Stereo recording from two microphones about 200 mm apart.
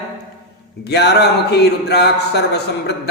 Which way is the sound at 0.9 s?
55° left (ahead or behind).